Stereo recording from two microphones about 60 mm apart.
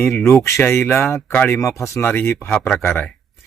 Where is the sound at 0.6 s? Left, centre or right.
Left.